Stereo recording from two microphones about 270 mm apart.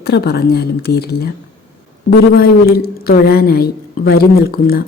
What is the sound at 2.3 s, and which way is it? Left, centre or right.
Speech, left.